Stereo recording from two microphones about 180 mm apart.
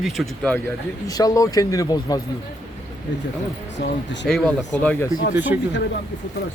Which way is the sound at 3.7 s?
80° left.